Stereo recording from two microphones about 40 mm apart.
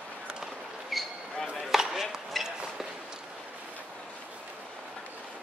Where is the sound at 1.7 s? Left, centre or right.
Centre.